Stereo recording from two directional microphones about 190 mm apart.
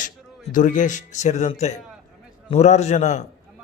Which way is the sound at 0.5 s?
45° left (ahead or behind).